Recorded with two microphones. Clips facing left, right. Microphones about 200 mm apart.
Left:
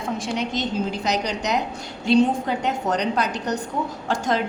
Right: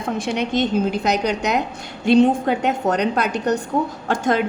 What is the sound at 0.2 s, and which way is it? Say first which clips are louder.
A woman's voice: right 5 dB; 55° right (ahead or behind).